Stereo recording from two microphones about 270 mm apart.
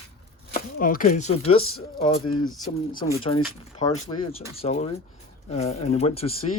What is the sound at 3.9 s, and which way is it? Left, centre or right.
Speech, left.